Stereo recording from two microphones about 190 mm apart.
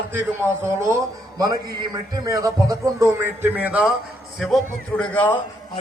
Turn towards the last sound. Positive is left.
turn(degrees=10)  # may be behind; listen again after turning